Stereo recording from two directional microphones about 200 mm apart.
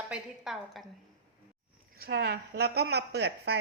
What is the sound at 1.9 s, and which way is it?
A woman's voice, 50° right (ahead or behind).